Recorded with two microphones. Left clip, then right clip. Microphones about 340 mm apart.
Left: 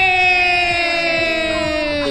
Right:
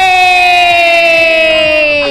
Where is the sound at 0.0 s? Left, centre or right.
Centre.